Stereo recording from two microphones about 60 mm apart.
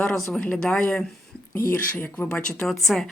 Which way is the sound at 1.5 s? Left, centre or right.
Left.